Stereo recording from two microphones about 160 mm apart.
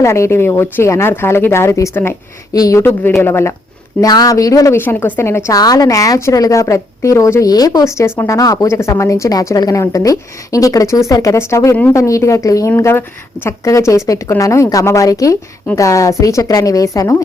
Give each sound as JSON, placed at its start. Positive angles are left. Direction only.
{"t": 0.0, "sound": "a woman's voice", "side_deg": 15}